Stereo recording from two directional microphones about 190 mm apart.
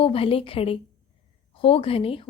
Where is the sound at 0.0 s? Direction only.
30° left (ahead or behind).